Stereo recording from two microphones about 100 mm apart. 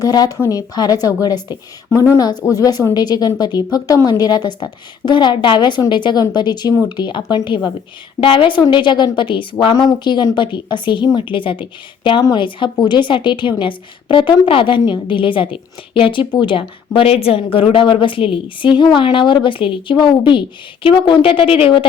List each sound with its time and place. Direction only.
0.0 s a woman's voice: 40° left (ahead or behind); by 21.8 s 60° left (ahead or behind)